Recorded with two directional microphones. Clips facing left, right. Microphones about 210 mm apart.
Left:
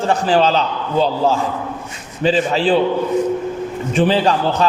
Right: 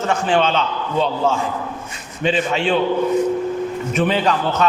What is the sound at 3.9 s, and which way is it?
Speech, 30° left (ahead or behind).